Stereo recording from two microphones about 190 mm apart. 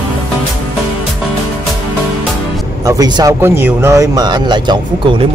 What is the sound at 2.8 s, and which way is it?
Speech, 20° right (ahead or behind).